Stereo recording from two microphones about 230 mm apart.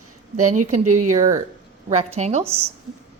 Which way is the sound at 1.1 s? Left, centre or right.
Right.